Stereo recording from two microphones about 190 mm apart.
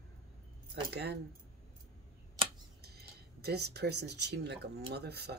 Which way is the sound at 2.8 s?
55° right (ahead or behind).